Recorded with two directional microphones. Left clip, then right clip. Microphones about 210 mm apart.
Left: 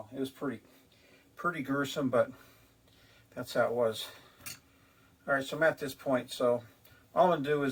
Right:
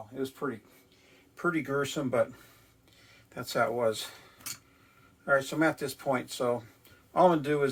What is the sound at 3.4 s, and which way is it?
Speech, 40° right (ahead or behind).